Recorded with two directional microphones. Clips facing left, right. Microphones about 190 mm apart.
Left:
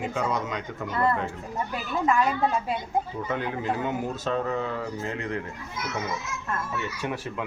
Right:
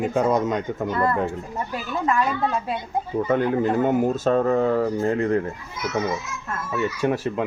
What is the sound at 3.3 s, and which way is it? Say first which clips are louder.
Speech: right 8 dB; 45° right (ahead or behind).